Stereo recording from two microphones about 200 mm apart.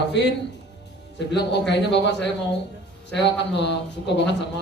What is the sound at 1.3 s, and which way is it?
A man's voice, 60° left (ahead or behind).